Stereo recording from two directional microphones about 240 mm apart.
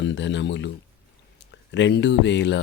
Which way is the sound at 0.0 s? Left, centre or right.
Left.